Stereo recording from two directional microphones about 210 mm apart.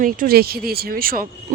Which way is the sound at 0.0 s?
45° right (ahead or behind).